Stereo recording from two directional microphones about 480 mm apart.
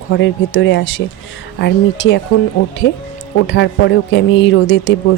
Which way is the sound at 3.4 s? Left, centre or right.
Left.